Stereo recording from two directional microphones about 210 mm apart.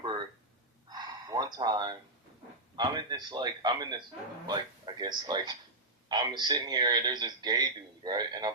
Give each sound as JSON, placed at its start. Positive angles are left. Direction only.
{"t": 0.0, "sound": "a sound", "side_deg": -20}
{"t": 0.9, "sound": "gasp", "side_deg": -20}
{"t": 2.7, "sound": "a man's voice", "side_deg": -20}